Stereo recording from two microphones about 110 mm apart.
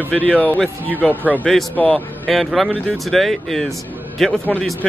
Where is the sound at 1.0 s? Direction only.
15° right (ahead or behind).